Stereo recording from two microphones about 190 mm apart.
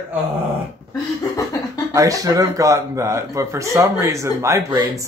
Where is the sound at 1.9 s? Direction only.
15° right (ahead or behind).